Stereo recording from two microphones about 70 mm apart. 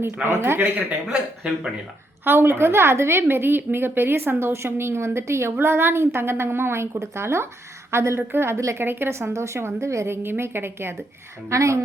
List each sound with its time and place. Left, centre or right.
0.3 s a woman's voice: right
2.2 s a woman's voice: right
11.4 s a woman's voice: right